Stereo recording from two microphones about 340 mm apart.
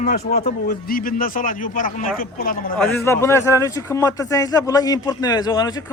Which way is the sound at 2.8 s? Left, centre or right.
Centre.